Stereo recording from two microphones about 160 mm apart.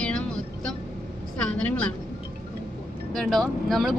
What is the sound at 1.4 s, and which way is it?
Speech, 10° left (ahead or behind).